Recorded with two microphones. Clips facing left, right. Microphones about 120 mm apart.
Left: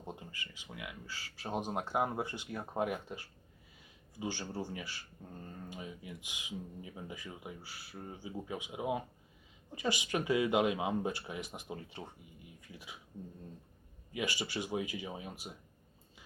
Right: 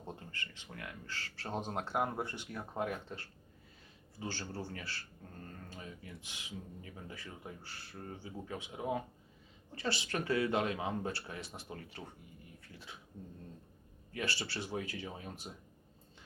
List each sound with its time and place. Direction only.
0.0 s speech: 15° left (ahead or behind)
14.1 s speech: 15° left (ahead or behind)